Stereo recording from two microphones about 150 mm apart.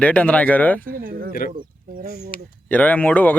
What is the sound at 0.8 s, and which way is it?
Speech, 70° right (ahead or behind).